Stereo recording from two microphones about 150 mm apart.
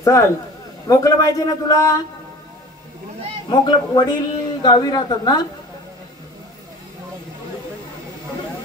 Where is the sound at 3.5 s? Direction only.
30° left (ahead or behind).